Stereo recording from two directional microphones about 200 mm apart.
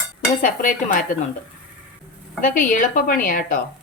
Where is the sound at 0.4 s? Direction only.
40° left (ahead or behind).